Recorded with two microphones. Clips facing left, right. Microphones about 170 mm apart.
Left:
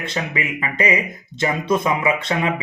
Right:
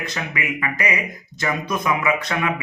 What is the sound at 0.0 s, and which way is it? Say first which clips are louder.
Speech: left 3 dB; 25° left (ahead or behind).